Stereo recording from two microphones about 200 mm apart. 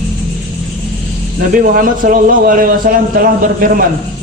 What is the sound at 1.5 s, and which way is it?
A man's voice, 45° right (ahead or behind).